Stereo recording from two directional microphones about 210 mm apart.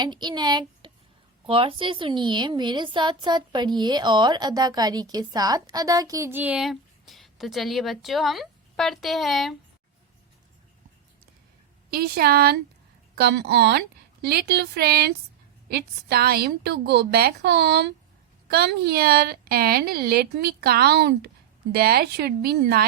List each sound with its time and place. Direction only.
0.0 s a woman's voice: 20° right (ahead or behind); by 9.6 s centre (ahead or behind)
11.9 s a woman's voice: 45° right (ahead or behind)